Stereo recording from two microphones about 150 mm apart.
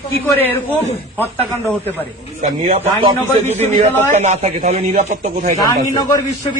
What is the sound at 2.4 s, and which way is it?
Speech, 50° right (ahead or behind).